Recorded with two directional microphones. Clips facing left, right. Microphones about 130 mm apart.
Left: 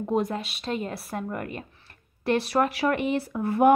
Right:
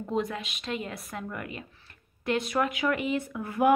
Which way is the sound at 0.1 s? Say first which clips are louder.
Left 4 dB; 40° left (ahead or behind).